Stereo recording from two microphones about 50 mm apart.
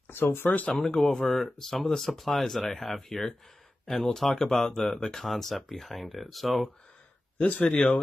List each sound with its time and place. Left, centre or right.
0.1 s speech: left
0.7 s speech: centre
7.3 s speech: left
7.6 s speech: centre